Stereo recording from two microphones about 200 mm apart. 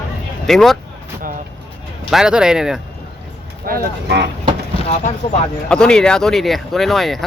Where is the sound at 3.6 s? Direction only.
50° right (ahead or behind).